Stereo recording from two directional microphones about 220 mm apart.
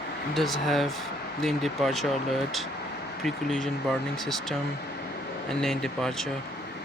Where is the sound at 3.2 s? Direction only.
Centre (ahead or behind).